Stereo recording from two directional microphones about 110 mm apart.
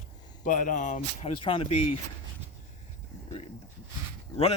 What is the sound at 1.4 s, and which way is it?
Speech, 50° left (ahead or behind).